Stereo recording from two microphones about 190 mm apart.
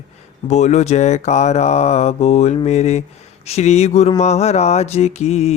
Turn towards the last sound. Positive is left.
turn(degrees=35)  # may be behind; listen again after turning